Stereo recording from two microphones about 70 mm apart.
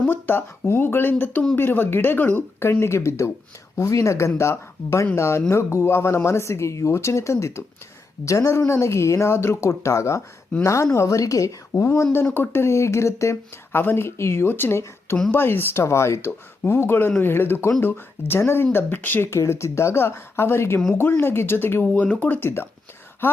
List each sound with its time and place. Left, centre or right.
0.1 s speech: left
19.3 s speech: left
21.8 s speech: left